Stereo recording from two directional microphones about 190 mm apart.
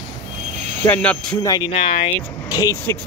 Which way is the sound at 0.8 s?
10° left (ahead or behind).